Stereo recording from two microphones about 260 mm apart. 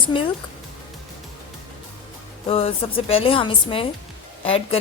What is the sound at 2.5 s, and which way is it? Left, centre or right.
A woman's voice, left.